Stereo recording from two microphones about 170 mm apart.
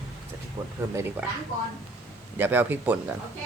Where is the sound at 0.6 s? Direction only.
30° right (ahead or behind).